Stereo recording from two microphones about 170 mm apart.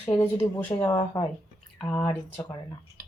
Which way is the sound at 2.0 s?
10° left (ahead or behind).